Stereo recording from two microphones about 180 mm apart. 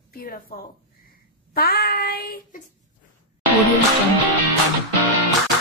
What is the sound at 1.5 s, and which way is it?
Child singing, 55° left (ahead or behind).